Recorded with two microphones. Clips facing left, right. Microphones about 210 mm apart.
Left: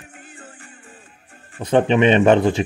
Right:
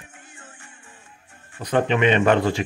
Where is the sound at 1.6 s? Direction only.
25° left (ahead or behind).